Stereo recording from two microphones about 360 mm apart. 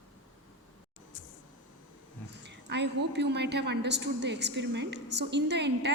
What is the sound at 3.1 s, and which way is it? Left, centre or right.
A woman's voice, right.